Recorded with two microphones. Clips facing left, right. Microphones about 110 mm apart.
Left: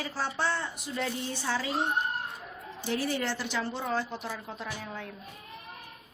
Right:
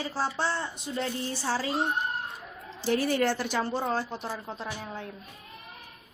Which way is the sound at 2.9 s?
50° right (ahead or behind).